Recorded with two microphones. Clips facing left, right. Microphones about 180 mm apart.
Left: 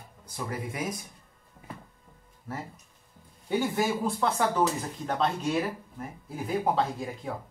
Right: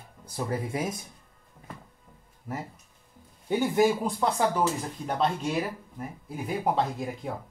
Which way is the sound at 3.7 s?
15° right (ahead or behind).